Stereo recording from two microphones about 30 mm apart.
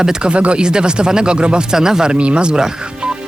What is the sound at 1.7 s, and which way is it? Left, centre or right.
Speech, centre.